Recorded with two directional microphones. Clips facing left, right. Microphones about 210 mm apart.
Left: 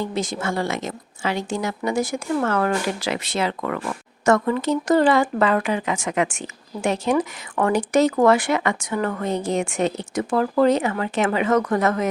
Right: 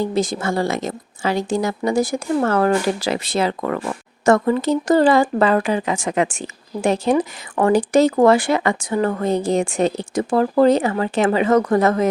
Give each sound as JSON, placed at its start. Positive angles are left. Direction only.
{"t": 0.0, "sound": "a woman's voice", "side_deg": -35}